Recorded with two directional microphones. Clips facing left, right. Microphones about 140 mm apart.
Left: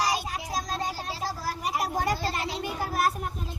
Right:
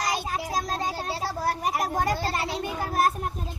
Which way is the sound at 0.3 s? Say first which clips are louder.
Right 3 dB; 45° right (ahead or behind).